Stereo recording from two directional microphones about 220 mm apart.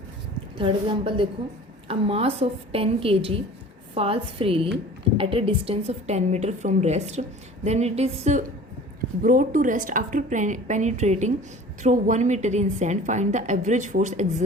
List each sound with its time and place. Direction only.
0.5 s a woman's voice: 25° right (ahead or behind)